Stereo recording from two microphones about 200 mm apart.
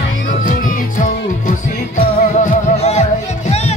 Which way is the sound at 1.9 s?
35° left (ahead or behind).